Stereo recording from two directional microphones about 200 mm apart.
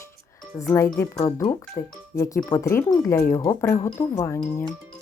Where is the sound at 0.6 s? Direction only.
15° left (ahead or behind).